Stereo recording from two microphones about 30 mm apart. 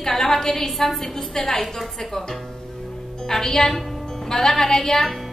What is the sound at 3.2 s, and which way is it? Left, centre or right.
A woman's voice, centre.